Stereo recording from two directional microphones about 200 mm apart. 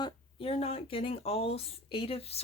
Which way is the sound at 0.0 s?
25° left (ahead or behind).